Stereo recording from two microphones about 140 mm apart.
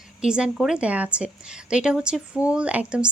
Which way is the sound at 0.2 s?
5° right (ahead or behind).